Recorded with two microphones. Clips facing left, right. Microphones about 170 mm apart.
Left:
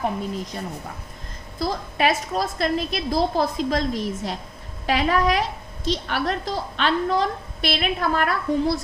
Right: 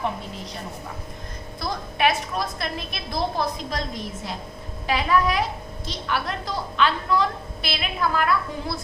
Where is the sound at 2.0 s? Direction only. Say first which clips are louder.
Left 1 dB; 40° left (ahead or behind).